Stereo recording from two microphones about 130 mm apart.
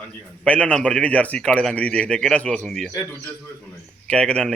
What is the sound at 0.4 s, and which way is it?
A man's voice, 10° left (ahead or behind).